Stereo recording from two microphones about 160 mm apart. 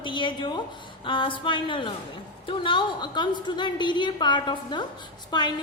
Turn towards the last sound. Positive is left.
turn(degrees=25)  # may be behind; listen again after turning